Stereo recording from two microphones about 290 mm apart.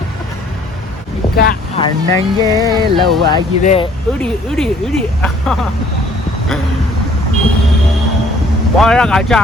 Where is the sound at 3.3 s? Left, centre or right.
Centre.